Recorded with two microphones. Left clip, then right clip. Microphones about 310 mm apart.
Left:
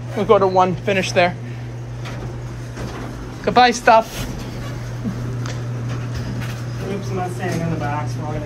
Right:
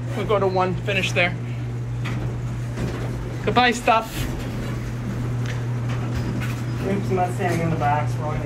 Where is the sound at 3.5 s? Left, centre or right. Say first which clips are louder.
Left 6 dB; centre.